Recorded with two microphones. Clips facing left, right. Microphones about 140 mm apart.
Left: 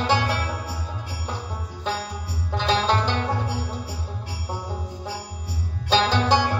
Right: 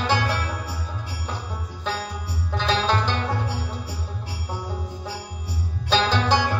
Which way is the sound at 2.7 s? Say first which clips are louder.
Left 1 dB; 15° left (ahead or behind).